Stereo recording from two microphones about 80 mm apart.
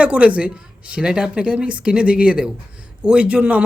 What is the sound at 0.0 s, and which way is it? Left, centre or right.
Speech, centre.